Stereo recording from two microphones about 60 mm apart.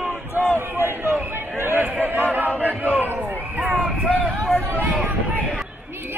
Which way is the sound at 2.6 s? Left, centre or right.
Right.